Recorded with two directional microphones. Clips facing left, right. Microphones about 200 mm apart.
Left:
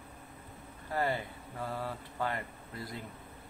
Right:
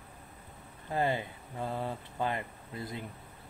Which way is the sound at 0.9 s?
20° right (ahead or behind).